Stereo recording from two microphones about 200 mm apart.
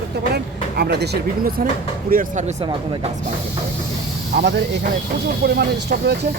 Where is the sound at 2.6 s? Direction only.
25° right (ahead or behind).